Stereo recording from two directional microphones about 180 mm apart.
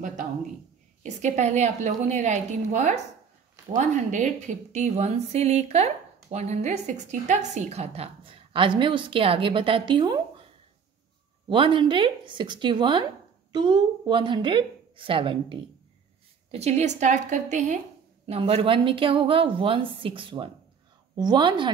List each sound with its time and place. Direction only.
1.0 s a woman's voice: 40° right (ahead or behind)
18.2 s a woman's voice: 30° right (ahead or behind)